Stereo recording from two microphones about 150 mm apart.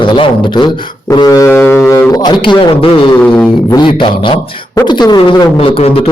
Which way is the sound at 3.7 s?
30° left (ahead or behind).